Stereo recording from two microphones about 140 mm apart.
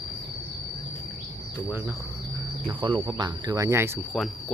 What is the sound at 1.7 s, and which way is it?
Speech, 15° right (ahead or behind).